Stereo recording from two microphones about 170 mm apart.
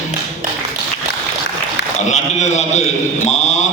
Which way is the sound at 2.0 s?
45° left (ahead or behind).